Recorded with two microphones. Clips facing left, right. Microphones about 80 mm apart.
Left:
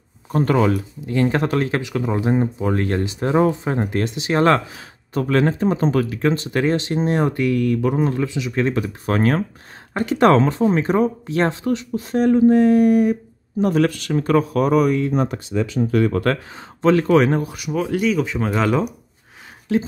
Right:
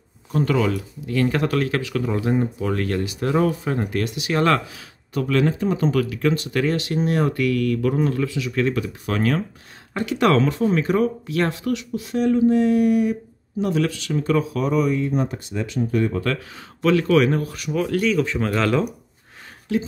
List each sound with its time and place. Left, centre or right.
0.3 s speech: left
1.0 s speech: left
15.9 s speech: left
16.5 s speech: left
17.5 s speech: centre
19.7 s speech: left